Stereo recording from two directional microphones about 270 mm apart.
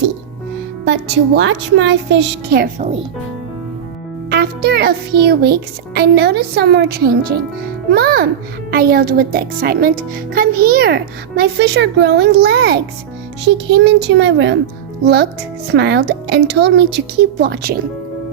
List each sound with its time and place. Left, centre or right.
0.9 s speech: right
4.3 s speech: right